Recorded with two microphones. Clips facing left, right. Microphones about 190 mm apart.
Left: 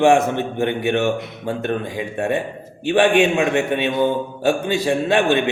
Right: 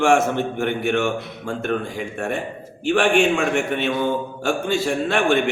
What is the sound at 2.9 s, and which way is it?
A man's voice, 20° left (ahead or behind).